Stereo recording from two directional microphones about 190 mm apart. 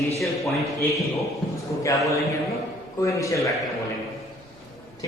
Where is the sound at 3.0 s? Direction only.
15° left (ahead or behind).